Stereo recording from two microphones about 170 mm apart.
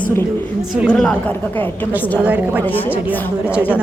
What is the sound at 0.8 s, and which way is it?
Speech, 5° left (ahead or behind).